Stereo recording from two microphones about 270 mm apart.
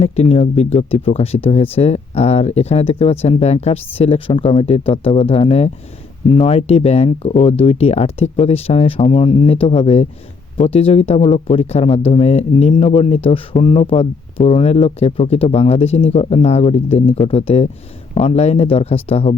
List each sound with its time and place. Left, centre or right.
0.0 s speech: left